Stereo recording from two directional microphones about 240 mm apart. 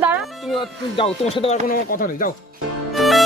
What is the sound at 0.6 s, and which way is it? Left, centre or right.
Speech, left.